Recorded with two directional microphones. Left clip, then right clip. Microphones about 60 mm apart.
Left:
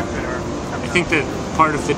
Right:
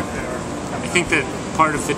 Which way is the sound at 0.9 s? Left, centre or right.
Centre.